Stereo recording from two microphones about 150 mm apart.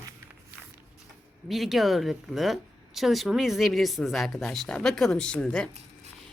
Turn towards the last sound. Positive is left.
turn(degrees=5)  # may be behind; listen again after turning